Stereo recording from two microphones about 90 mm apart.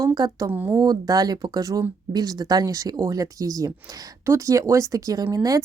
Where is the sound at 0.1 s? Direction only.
50° right (ahead or behind).